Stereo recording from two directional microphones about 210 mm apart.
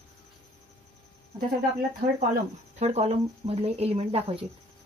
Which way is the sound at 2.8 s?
30° right (ahead or behind).